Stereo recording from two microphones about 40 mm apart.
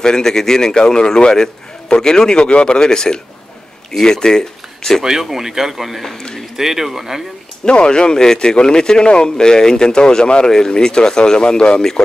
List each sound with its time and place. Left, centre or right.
0.0 s a man's voice: centre
5.0 s speech: centre
7.6 s speech: left